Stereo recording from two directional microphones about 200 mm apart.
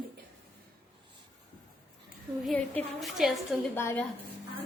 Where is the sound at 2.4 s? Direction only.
Centre (ahead or behind).